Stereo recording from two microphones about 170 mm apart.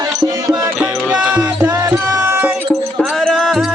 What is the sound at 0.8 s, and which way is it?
Music, 5° right (ahead or behind).